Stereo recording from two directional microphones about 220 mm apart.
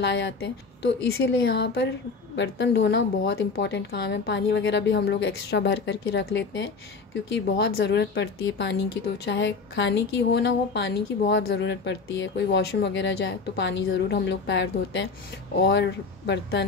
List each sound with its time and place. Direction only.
0.0 s speech: 50° left (ahead or behind)